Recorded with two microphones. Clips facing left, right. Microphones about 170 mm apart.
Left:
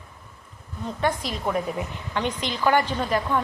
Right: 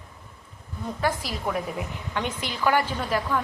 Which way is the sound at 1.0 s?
Centre (ahead or behind).